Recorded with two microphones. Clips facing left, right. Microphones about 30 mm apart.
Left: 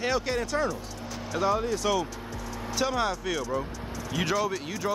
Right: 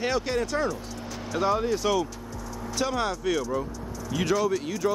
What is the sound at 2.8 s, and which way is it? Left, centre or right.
Speech, centre.